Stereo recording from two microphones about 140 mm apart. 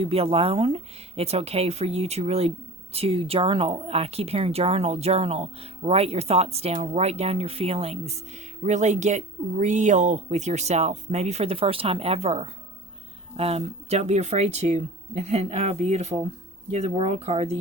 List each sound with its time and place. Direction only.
0.0 s speech: 45° right (ahead or behind)